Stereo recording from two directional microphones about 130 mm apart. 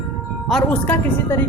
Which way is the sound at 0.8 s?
15° left (ahead or behind).